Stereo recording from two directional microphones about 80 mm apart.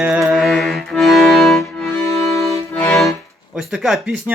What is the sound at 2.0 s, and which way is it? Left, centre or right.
Music, left.